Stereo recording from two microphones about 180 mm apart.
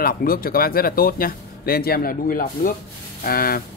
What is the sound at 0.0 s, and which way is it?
Speech, 55° left (ahead or behind).